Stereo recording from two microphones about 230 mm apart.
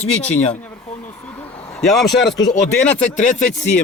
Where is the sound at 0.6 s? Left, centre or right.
Centre.